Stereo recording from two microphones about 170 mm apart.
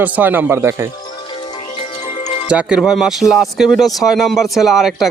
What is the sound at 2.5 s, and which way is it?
Speech, 5° right (ahead or behind).